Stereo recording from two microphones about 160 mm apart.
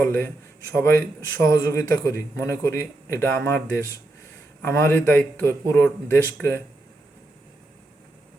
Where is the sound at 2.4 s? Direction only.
15° left (ahead or behind).